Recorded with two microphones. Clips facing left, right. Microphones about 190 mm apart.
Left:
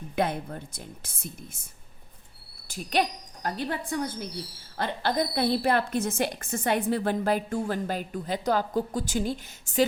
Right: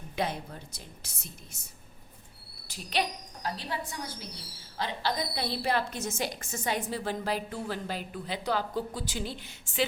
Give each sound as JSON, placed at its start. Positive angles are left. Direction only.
{"t": 0.2, "sound": "a woman's voice", "side_deg": 55}
{"t": 2.6, "sound": "a woman's voice", "side_deg": 50}